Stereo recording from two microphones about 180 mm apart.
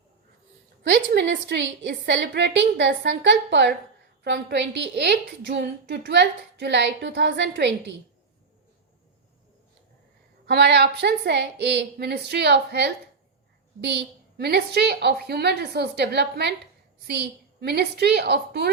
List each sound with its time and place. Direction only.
0.9 s a woman's voice: 80° right
10.4 s a woman's voice: 70° right (ahead or behind)